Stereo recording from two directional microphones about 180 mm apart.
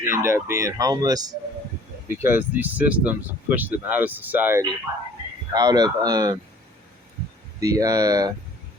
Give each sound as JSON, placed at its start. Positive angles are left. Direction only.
{"t": 0.0, "sound": "speech", "side_deg": -15}
{"t": 5.5, "sound": "speech", "side_deg": -20}
{"t": 7.6, "sound": "speech", "side_deg": -20}